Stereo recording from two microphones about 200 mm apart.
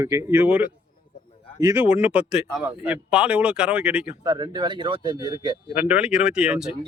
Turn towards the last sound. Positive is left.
turn(degrees=-5)  # may be behind; listen again after turning